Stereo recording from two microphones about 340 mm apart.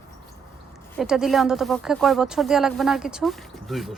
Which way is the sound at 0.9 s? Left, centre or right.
Centre.